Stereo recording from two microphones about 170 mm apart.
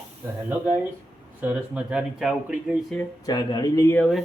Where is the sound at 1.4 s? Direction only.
10° right (ahead or behind).